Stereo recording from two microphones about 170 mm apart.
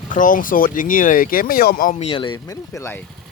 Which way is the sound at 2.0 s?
30° left (ahead or behind).